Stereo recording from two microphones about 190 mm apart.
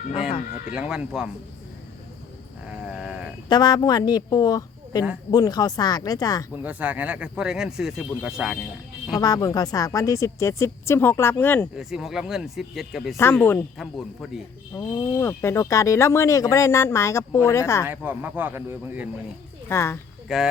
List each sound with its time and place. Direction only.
0.1 s a woman's voice: 30° left (ahead or behind)
0.7 s speech: 5° right (ahead or behind)
2.6 s sheep: 5° right (ahead or behind)
3.5 s a woman's voice: 20° left (ahead or behind)
6.6 s speech: 10° right (ahead or behind)
9.2 s speech: 20° left (ahead or behind)
11.8 s speech: centre (ahead or behind)
13.3 s speech: 10° left (ahead or behind)
14.8 s speech: 10° left (ahead or behind)
17.8 s speech: 10° right (ahead or behind)
19.6 s speech: 15° left (ahead or behind)
20.2 s speech: centre (ahead or behind)